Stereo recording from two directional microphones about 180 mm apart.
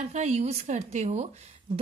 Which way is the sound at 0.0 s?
40° right (ahead or behind).